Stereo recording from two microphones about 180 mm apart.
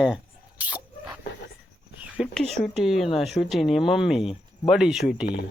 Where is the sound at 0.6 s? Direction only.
10° right (ahead or behind).